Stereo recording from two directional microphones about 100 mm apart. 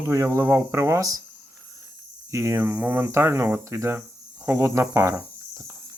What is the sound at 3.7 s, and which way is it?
Speech, 30° right (ahead or behind).